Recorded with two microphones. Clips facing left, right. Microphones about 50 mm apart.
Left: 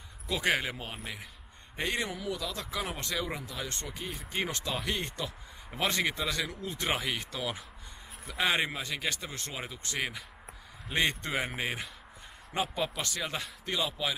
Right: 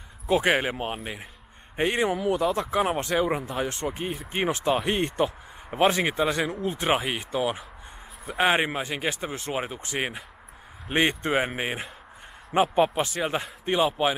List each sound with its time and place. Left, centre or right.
0.3 s speech: right
9.5 s speech: right